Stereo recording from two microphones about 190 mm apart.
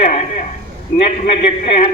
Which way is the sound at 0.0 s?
40° left (ahead or behind).